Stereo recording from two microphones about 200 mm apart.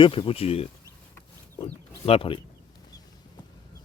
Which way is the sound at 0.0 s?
25° left (ahead or behind).